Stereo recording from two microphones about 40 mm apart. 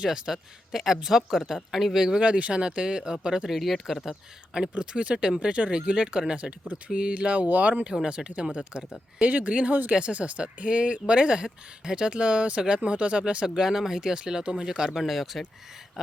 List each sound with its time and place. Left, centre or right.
0.1 s speech: centre
2.2 s speech: right
3.5 s speech: centre
4.7 s speech: right
6.4 s speech: right
8.0 s speech: right
9.2 s speech: right; by 14.9 s centre
14.9 s speech: centre